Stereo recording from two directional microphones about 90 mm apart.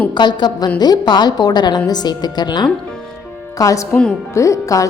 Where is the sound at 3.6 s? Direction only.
40° left (ahead or behind).